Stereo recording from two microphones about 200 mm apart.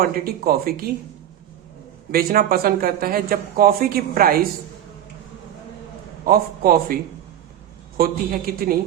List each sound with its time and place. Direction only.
0.0 s a woman's voice: 50° right (ahead or behind)
2.1 s a woman's voice: 45° right (ahead or behind)
6.2 s a woman's voice: 50° right (ahead or behind)
7.9 s a woman's voice: 45° right (ahead or behind)